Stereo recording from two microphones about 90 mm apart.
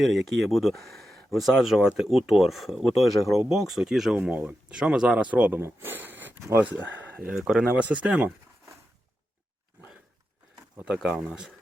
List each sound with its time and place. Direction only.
0.0 s speech: centre (ahead or behind)
4.3 s speech: 15° right (ahead or behind)
10.9 s speech: 10° right (ahead or behind)